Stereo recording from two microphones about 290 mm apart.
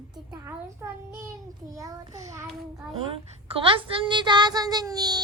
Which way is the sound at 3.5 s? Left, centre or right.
Centre.